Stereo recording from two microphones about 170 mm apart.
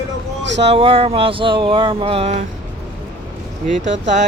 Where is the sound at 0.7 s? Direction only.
35° right (ahead or behind).